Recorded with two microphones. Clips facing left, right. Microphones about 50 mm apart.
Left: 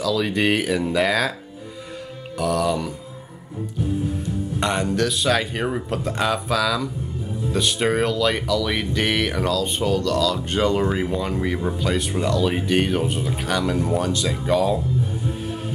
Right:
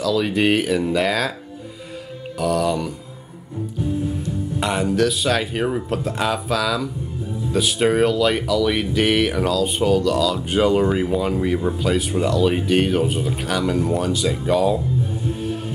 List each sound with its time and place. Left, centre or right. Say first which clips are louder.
0.0 s speech: right 2 dB; centre
2.3 s speech: right 1 dB; centre
4.6 s speech: right 2 dB; centre